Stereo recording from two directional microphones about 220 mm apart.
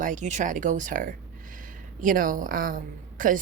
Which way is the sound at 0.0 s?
35° right (ahead or behind).